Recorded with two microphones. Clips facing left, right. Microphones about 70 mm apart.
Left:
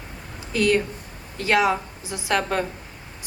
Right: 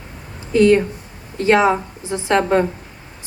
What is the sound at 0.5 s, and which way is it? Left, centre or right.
A woman's voice, right.